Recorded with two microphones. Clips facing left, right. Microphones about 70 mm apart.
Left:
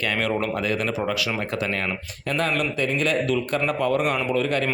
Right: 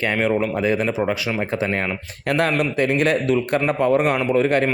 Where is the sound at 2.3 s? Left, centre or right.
Right.